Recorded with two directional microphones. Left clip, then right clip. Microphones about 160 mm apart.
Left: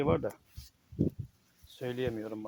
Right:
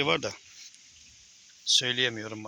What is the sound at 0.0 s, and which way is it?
Speech, 15° right (ahead or behind).